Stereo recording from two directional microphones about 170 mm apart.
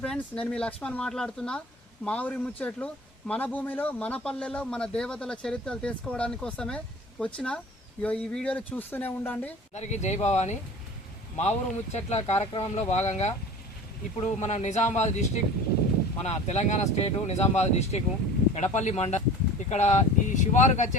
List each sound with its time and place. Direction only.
0.0 s a man's voice: 5° left (ahead or behind)
9.7 s speech: 40° left (ahead or behind)
16.2 s speech: 40° left (ahead or behind)